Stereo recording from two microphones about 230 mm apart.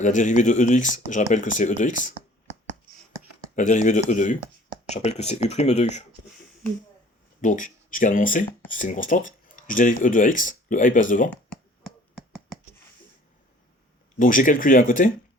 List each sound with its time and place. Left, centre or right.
0.0 s speech: left
3.5 s speech: left
7.4 s speech: left
11.3 s a sound: centre
14.2 s speech: left